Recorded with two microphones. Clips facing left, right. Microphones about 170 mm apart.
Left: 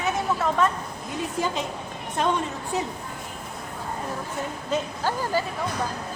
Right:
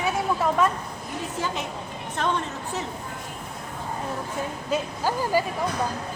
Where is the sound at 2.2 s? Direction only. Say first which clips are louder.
Left 2 dB; 15° left (ahead or behind).